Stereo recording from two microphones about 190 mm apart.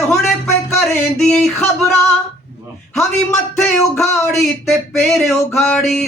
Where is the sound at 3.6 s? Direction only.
Centre (ahead or behind).